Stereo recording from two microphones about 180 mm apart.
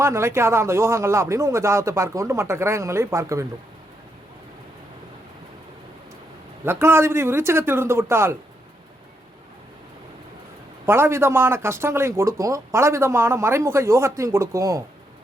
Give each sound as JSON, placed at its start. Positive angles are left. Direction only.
{"t": 0.0, "sound": "speech", "side_deg": -15}
{"t": 6.7, "sound": "speech", "side_deg": -15}
{"t": 10.8, "sound": "speech", "side_deg": -15}